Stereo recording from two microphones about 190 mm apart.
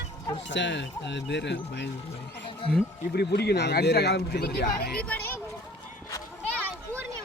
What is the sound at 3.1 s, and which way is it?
Speech, 60° left (ahead or behind).